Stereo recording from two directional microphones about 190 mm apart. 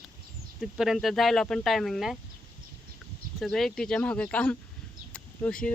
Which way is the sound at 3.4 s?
Centre (ahead or behind).